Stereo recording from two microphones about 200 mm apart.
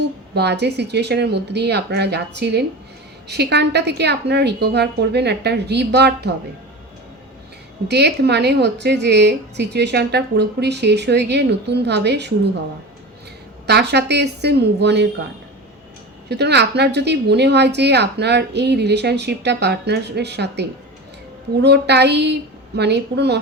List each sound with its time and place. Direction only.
0.3 s a woman's voice: 55° right (ahead or behind)
7.9 s a woman's voice: 55° right (ahead or behind)
13.7 s a woman's voice: 55° right (ahead or behind)
16.3 s a woman's voice: 55° right (ahead or behind)